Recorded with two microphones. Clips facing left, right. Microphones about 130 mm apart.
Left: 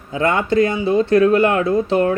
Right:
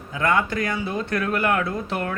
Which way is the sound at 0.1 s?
25° left (ahead or behind).